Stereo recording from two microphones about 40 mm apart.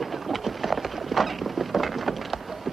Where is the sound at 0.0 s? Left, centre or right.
Centre.